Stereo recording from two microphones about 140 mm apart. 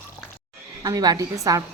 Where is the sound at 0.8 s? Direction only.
25° right (ahead or behind).